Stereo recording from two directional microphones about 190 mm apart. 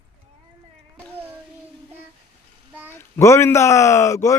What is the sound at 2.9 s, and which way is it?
Speech, 10° left (ahead or behind).